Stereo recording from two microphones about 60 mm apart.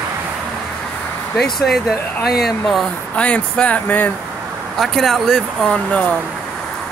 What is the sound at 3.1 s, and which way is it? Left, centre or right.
Speech, centre.